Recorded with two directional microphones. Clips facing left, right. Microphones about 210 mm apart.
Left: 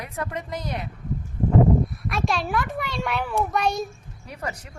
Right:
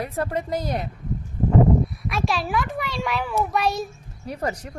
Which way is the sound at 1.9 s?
Centre (ahead or behind).